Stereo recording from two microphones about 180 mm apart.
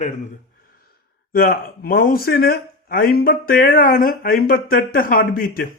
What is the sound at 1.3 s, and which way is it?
A man's voice, 55° left (ahead or behind).